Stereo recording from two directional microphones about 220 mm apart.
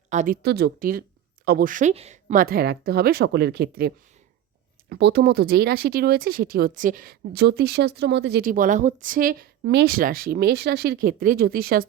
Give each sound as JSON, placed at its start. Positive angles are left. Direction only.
{"t": 0.1, "sound": "speech", "side_deg": -35}
{"t": 0.4, "sound": "speech", "side_deg": -45}